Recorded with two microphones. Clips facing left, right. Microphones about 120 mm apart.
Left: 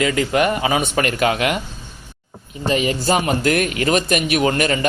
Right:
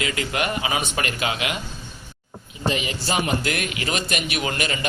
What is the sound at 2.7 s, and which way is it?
A man's voice, 45° left (ahead or behind).